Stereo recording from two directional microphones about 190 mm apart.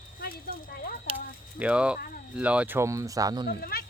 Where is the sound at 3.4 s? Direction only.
55° left (ahead or behind).